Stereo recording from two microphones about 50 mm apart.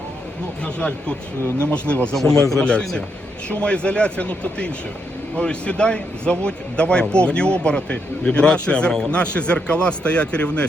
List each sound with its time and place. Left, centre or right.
0.6 s speech: centre
2.1 s a man's voice: centre